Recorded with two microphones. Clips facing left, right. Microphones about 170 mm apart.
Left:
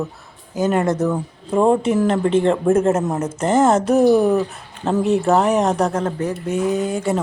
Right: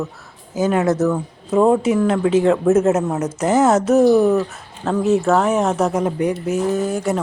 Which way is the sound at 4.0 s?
15° left (ahead or behind).